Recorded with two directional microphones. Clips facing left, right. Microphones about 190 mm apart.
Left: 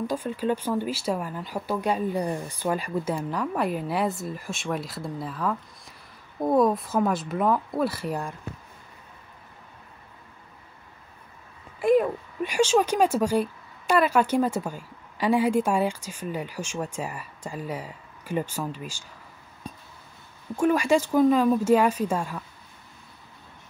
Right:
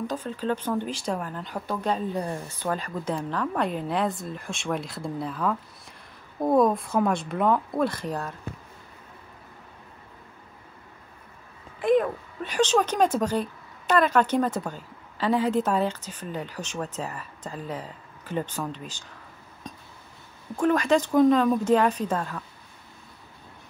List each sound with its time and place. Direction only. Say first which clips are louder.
0.0 s speech: left 2 dB; 10° left (ahead or behind)
11.8 s speech: left 1 dB; 5° left (ahead or behind)
20.5 s speech: even; 10° left (ahead or behind)